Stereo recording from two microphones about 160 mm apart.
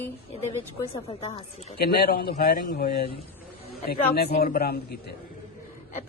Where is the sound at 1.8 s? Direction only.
70° left (ahead or behind).